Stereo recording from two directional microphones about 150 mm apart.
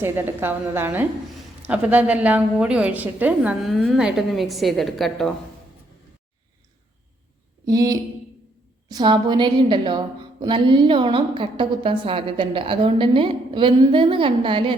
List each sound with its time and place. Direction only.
0.0 s a woman's voice: 15° right (ahead or behind)
3.7 s a woman's voice: centre (ahead or behind)
7.6 s a sound: 25° right (ahead or behind)
8.9 s a woman's voice: 30° right (ahead or behind)